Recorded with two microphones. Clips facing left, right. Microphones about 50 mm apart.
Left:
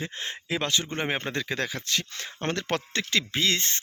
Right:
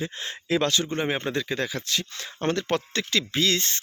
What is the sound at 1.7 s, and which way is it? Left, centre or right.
Speech, left.